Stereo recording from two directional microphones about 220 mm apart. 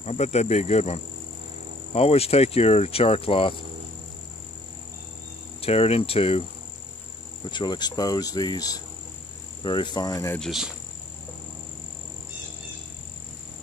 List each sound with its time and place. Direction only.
0.0 s speech: 30° left (ahead or behind)
5.6 s speech: 25° left (ahead or behind)
7.5 s cricket: 20° left (ahead or behind)